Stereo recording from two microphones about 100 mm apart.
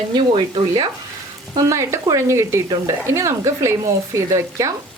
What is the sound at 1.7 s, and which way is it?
Speech, 30° right (ahead or behind).